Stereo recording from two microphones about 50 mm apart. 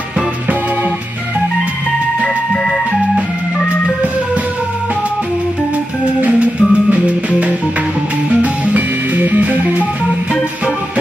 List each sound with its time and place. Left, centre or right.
2.2 s music: centre
6.2 s music: right